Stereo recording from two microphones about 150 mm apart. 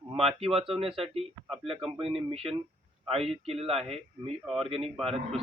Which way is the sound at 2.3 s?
40° right (ahead or behind).